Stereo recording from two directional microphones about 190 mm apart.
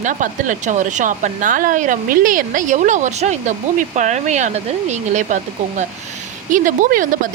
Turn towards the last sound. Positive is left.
turn(degrees=-45)  # may be behind; listen again after turning